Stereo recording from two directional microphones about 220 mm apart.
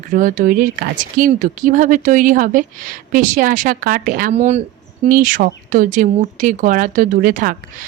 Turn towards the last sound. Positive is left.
turn(degrees=-40)  # may be behind; listen again after turning